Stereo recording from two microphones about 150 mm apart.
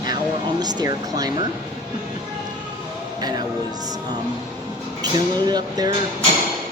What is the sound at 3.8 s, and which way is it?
Speech, 25° right (ahead or behind).